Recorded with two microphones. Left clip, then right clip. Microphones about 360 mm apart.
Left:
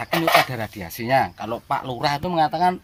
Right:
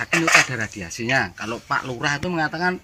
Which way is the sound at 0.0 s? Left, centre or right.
Centre.